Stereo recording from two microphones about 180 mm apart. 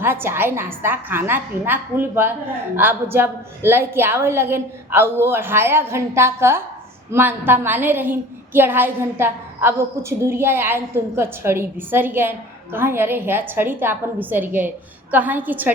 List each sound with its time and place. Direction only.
0.0 s a woman's voice: 10° right (ahead or behind)